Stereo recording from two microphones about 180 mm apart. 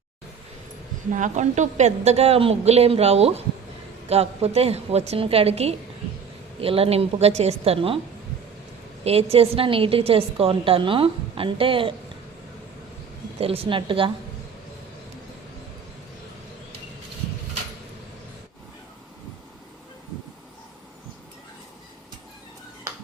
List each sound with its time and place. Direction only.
1.1 s a woman's voice: 40° right (ahead or behind)
9.0 s a woman's voice: 35° right (ahead or behind)
13.4 s a woman's voice: 30° right (ahead or behind)